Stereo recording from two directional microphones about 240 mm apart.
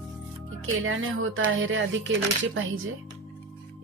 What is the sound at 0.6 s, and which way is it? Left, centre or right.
Speech, right.